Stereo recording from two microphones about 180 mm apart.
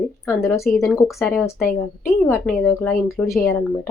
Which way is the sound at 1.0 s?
Centre (ahead or behind).